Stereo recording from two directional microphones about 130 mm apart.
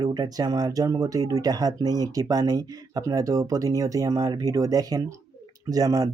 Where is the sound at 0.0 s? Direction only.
30° right (ahead or behind).